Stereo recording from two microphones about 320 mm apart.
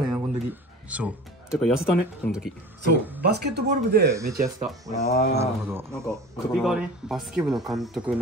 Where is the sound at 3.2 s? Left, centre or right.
Right.